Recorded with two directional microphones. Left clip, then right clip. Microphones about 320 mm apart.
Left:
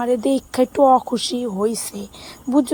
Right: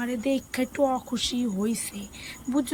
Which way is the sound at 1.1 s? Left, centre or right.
Centre.